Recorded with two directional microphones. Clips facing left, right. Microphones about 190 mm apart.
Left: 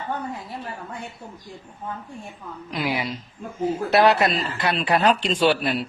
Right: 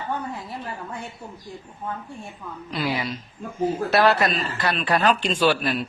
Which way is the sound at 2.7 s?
15° left (ahead or behind).